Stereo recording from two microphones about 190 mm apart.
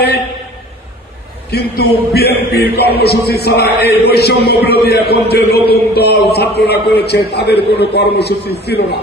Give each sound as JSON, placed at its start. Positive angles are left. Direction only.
{"t": 1.5, "sound": "a man's voice", "side_deg": 55}